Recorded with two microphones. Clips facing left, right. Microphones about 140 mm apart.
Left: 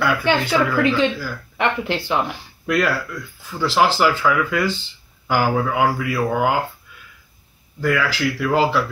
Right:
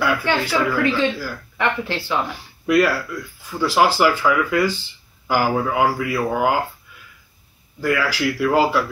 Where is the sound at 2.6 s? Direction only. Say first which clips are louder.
Right 3 dB; 5° right (ahead or behind).